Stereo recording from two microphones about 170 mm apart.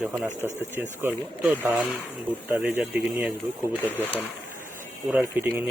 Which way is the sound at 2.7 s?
10° right (ahead or behind).